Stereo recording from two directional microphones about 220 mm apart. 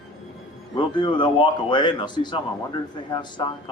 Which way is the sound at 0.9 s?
20° left (ahead or behind).